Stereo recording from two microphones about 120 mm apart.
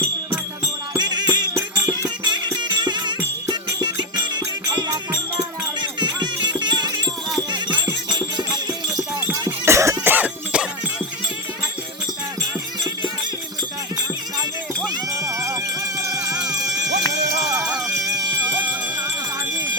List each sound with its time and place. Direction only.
0.9 s music: 35° right (ahead or behind)
4.4 s music: 35° right (ahead or behind)
8.1 s music: 35° right (ahead or behind)
10.0 s cough: 15° right (ahead or behind)
14.8 s music: 30° right (ahead or behind)
17.6 s music: 5° right (ahead or behind)